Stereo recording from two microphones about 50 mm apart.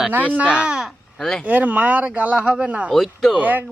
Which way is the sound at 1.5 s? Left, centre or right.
Right.